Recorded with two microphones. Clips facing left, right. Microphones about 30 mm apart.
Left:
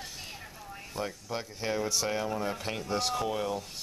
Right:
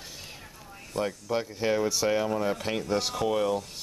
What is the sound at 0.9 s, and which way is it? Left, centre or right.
Speech, centre.